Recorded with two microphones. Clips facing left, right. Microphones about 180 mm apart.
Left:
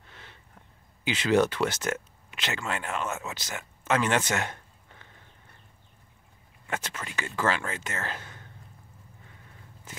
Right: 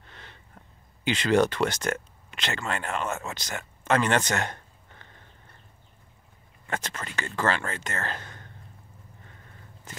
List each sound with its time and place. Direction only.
0.0 s a sound: 5° left (ahead or behind)
1.0 s speech: 5° left (ahead or behind)
6.7 s speech: 5° left (ahead or behind)